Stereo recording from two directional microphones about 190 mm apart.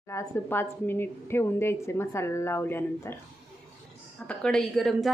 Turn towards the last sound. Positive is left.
turn(degrees=0)  # may be behind; listen again after turning